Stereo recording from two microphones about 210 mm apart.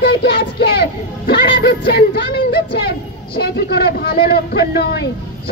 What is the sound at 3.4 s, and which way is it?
A man's voice, 50° left (ahead or behind).